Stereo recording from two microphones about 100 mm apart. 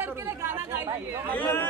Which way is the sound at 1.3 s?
20° left (ahead or behind).